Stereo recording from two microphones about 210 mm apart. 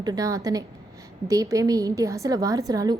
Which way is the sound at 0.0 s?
20° right (ahead or behind).